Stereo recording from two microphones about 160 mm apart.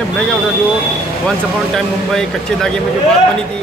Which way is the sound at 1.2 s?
5° left (ahead or behind).